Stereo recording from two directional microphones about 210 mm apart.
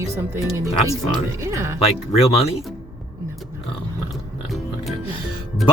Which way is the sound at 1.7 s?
30° left (ahead or behind).